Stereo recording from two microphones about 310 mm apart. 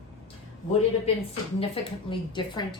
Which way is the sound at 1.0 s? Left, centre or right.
Centre.